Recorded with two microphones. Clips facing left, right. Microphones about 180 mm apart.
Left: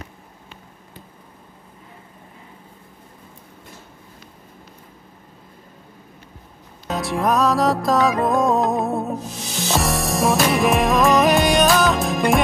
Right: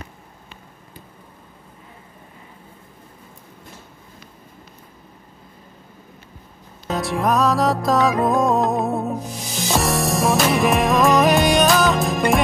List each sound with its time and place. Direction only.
6.9 s music: centre (ahead or behind)